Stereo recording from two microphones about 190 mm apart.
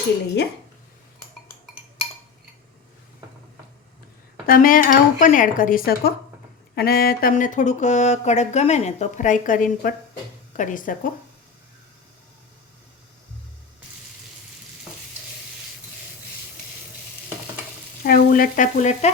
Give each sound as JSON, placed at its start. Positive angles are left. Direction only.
{"t": 4.4, "sound": "speech", "side_deg": 50}
{"t": 18.0, "sound": "frying", "side_deg": 50}